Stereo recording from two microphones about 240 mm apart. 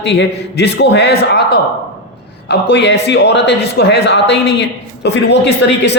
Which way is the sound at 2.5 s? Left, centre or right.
Left.